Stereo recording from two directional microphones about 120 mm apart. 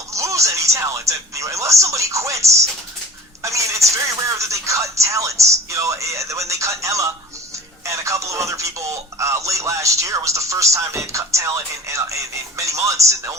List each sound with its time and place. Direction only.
0.1 s speech: 25° right (ahead or behind)